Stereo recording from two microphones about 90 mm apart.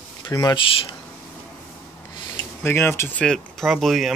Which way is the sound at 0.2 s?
50° left (ahead or behind).